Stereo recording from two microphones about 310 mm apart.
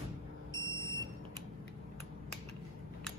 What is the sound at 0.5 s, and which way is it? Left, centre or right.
Smoke detector, centre.